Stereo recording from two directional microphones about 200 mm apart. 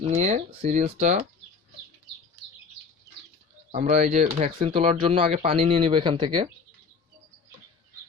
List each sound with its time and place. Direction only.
0.1 s speech: 35° right (ahead or behind)
3.7 s speech: 35° right (ahead or behind)
4.6 s speech: 25° right (ahead or behind)